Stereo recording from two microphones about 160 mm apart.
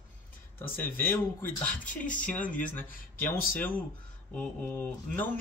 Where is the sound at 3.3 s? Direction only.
60° left (ahead or behind).